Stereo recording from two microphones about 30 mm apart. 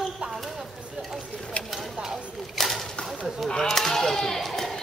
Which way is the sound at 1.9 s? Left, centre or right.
Centre.